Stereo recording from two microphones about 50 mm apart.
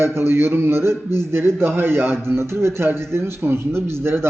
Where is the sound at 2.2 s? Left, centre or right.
Right.